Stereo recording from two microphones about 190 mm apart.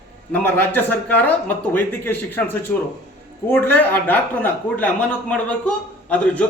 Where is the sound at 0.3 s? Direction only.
10° left (ahead or behind).